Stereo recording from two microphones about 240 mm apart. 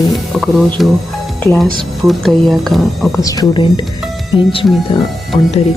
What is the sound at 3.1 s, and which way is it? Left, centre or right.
Speech, centre.